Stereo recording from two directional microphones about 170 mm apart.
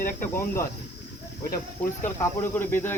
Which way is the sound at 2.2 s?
10° left (ahead or behind).